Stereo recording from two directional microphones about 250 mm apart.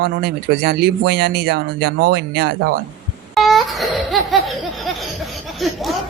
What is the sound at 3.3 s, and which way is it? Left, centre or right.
Laughter, centre.